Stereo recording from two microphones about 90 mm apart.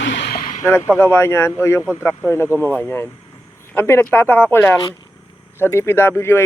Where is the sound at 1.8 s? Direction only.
20° right (ahead or behind).